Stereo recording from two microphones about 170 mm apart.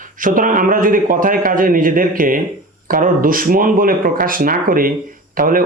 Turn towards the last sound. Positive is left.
turn(degrees=-55)  # may be behind; listen again after turning